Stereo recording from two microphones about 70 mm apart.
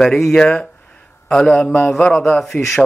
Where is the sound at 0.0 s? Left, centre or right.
Centre.